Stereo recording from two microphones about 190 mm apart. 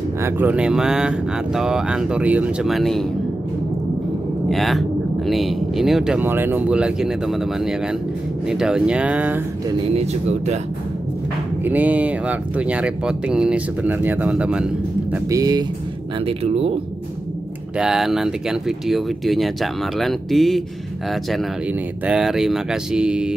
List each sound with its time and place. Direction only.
0.2 s speech: 10° right (ahead or behind)
4.5 s speech: centre (ahead or behind)
9.9 s speech: 35° right (ahead or behind)
11.6 s speech: 10° right (ahead or behind)
15.2 s speech: 20° right (ahead or behind)
16.3 s speech: 30° right (ahead or behind)
17.7 s speech: 5° right (ahead or behind)
22.0 s speech: 5° right (ahead or behind)